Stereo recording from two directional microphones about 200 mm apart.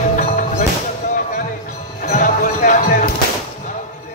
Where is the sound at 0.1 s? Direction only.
40° left (ahead or behind).